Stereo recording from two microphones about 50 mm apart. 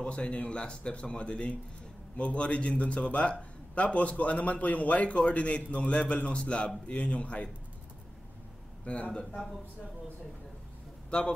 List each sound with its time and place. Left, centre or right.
0.0 s a man's voice: left
8.9 s a man's voice: left
9.2 s speech: centre
11.1 s speech: left